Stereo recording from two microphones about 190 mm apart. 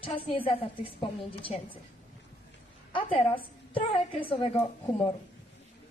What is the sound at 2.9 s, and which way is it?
A woman's voice, 25° left (ahead or behind).